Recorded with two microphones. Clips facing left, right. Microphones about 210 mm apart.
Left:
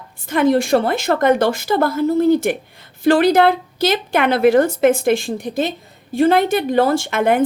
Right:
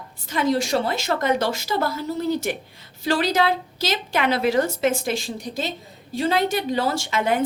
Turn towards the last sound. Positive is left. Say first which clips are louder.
# left 6 dB
turn(degrees=55)  # may be behind; listen again after turning